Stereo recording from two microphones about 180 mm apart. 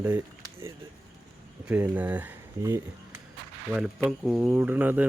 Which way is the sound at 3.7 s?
Centre (ahead or behind).